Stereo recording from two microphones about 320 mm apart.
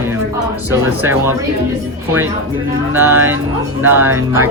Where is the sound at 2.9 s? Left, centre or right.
Centre.